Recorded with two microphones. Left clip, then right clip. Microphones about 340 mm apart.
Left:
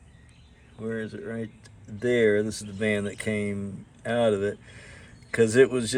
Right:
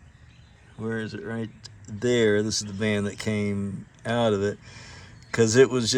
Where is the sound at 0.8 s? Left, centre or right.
Centre.